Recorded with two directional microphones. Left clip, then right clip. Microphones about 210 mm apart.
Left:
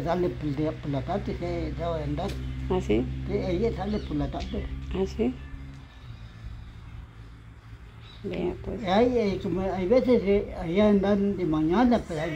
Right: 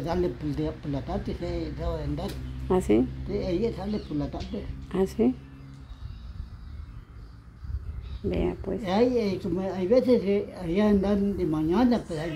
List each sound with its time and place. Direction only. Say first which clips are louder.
0.0 s a woman's voice: left 1 dB; centre (ahead or behind)
2.7 s speech: right 3 dB; 25° right (ahead or behind)
3.3 s a woman's voice: left 1 dB; 5° right (ahead or behind)
4.9 s speech: right 3 dB; 25° right (ahead or behind)
8.3 s speech: right 2 dB; 30° right (ahead or behind)
8.8 s a woman's voice: left 2 dB; centre (ahead or behind)